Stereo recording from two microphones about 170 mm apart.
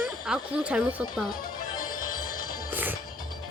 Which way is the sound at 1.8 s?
55° left (ahead or behind).